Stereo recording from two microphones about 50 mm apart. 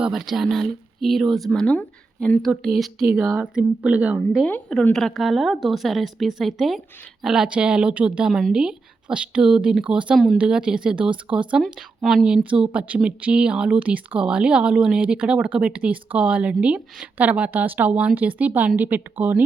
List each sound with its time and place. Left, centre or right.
0.1 s speech: centre
2.6 s speech: centre
3.4 s speech: right
4.9 s a woman's voice: centre
5.1 s speech: centre
7.3 s speech: centre
8.3 s speech: centre
8.5 s speech: centre
12.0 s speech: centre
12.5 s speech: right
13.7 s speech: right